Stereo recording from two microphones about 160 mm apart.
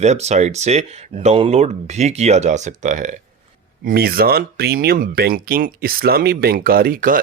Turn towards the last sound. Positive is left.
turn(degrees=-60)  # may be behind; listen again after turning